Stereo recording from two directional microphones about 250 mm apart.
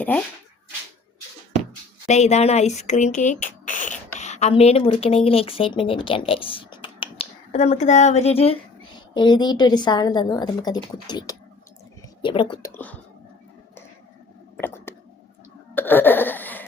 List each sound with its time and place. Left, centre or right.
2.0 s a woman's voice: left
12.7 s whispering: centre
14.5 s whispering: centre
15.7 s laughter: centre